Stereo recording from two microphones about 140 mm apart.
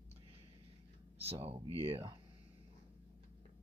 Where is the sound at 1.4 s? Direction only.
45° right (ahead or behind).